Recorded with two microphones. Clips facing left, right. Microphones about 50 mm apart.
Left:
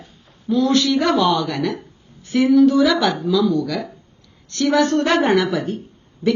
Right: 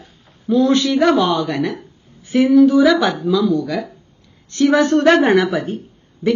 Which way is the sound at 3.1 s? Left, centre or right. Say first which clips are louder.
Right 1 dB; right.